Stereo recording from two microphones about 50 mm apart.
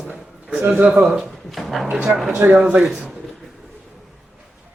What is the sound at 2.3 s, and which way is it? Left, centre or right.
Speech, right.